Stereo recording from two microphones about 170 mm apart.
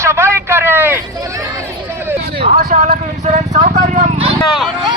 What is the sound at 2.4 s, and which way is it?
Vehicle, 50° right (ahead or behind).